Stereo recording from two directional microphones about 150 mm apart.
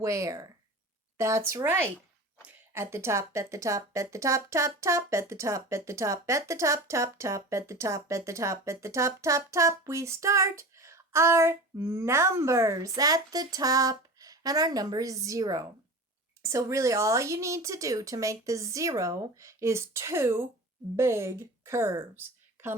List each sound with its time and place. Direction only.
0.0 s a woman's voice: 20° right (ahead or behind)